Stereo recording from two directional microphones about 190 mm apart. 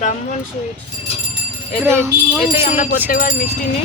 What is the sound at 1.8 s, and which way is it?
Speech, 15° right (ahead or behind).